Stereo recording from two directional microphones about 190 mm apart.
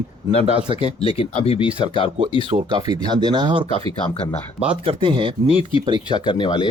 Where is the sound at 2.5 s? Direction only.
30° right (ahead or behind).